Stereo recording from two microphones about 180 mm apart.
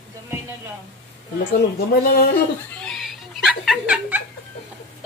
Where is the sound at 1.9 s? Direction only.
60° left (ahead or behind).